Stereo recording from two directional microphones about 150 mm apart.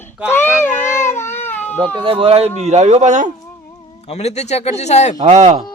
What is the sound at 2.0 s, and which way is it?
Speech, 35° right (ahead or behind).